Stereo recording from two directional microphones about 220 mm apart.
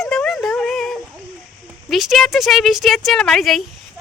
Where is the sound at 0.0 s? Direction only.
Centre (ahead or behind).